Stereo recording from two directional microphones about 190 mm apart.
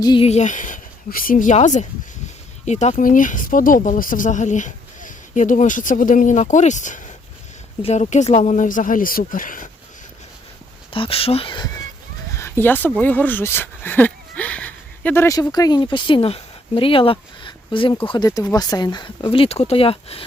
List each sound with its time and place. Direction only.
0.0 s speech: 25° left (ahead or behind)
0.3 s speech: 40° left (ahead or behind)
10.9 s speech: 30° left (ahead or behind)
12.4 s speech: 10° left (ahead or behind); by 20.2 s 30° left (ahead or behind)